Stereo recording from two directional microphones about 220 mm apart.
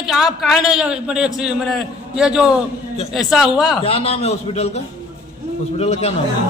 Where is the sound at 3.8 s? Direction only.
25° left (ahead or behind).